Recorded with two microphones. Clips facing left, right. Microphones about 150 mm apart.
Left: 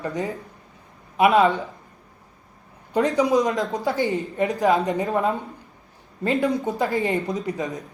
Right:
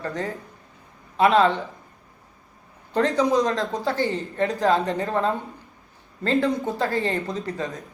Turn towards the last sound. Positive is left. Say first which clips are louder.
# left 2 dB
turn(degrees=15)  # may be behind; listen again after turning